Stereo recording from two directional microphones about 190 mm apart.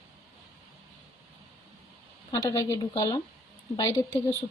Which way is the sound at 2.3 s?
20° left (ahead or behind).